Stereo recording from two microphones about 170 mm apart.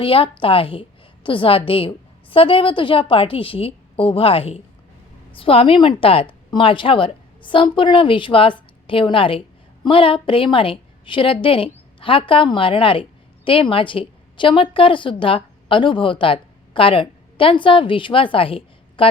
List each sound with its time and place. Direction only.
0.0 s a woman's voice: 30° left (ahead or behind)